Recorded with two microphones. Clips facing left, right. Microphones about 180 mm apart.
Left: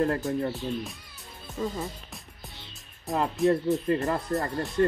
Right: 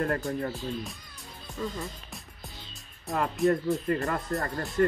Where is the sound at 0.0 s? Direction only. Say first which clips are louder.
Left 3 dB; 25° left (ahead or behind).